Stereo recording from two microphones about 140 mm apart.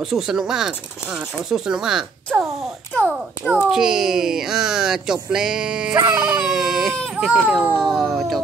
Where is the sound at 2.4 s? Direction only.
Centre (ahead or behind).